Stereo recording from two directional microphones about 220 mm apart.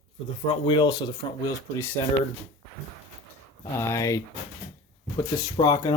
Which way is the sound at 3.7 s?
10° left (ahead or behind).